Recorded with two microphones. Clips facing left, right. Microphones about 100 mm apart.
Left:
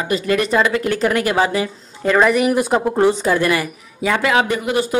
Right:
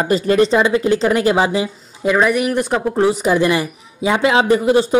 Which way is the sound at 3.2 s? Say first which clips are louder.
Right 2 dB; 20° right (ahead or behind).